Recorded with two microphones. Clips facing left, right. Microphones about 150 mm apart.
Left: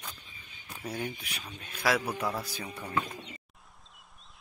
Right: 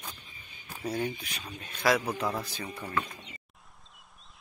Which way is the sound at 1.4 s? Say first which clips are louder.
Right 3 dB; 5° left (ahead or behind).